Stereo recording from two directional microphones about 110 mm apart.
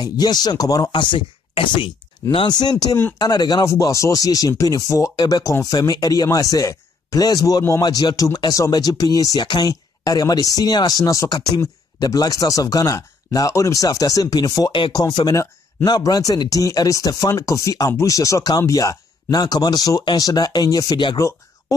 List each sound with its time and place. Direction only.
0.0 s speech: 40° left (ahead or behind)
0.9 s speech: 50° left (ahead or behind)
3.7 s speech: 30° left (ahead or behind)
7.8 s speech: 40° left (ahead or behind)
21.2 s a sound: 30° left (ahead or behind)